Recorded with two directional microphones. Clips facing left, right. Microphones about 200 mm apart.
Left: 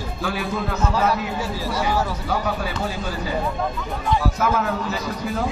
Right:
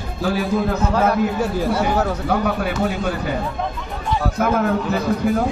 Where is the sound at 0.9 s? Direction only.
55° right (ahead or behind).